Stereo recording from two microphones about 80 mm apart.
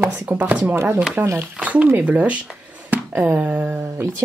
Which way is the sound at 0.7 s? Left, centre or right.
Right.